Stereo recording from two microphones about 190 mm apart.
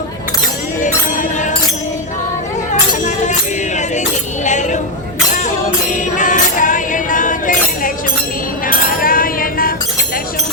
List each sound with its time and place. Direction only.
0.8 s music: 40° left (ahead or behind)
3.0 s music: 40° left (ahead or behind)
4.4 s a sound: 40° left (ahead or behind)
5.3 s music: 40° left (ahead or behind)
8.6 s chink: 50° left (ahead or behind)